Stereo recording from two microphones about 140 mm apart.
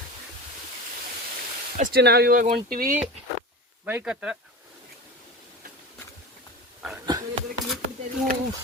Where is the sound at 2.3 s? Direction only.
80° right.